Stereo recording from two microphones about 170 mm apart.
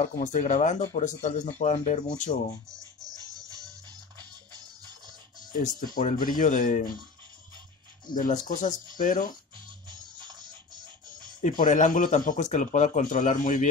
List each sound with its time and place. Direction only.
0.0 s a man's voice: 45° left (ahead or behind)
4.2 s music: 25° right (ahead or behind)
5.5 s a man's voice: 50° left (ahead or behind)
8.1 s a man's voice: 55° left (ahead or behind)
9.8 s music: 25° right (ahead or behind)
11.6 s a man's voice: 50° left (ahead or behind)